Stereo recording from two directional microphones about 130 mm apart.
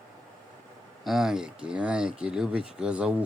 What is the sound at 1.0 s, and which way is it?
Speech, 5° right (ahead or behind).